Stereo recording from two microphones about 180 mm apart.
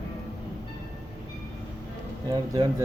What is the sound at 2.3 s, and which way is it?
Mantra, 20° right (ahead or behind).